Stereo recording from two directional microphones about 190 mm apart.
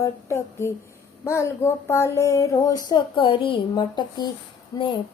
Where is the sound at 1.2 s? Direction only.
15° left (ahead or behind).